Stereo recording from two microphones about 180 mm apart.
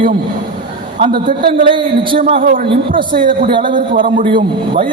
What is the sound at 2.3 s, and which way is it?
A woman's voice, 50° right (ahead or behind).